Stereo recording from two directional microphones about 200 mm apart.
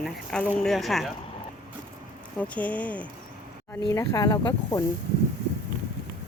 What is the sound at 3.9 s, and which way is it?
Speech, 15° left (ahead or behind).